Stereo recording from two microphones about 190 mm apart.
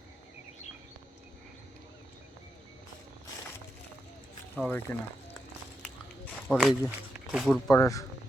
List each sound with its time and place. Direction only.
4.5 s speech: 10° left (ahead or behind)
6.5 s speech: centre (ahead or behind)
7.7 s speech: 15° left (ahead or behind)